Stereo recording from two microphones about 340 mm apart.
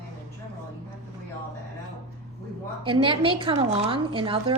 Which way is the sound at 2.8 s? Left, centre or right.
Centre.